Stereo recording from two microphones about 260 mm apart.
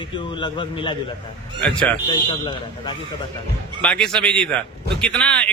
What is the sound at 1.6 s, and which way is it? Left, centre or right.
Speech, centre.